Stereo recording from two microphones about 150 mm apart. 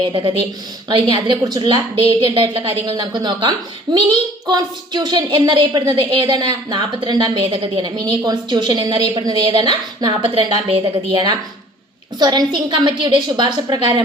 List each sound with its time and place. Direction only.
0.0 s a woman's voice: 30° right (ahead or behind)
2.8 s a woman's voice: 30° right (ahead or behind)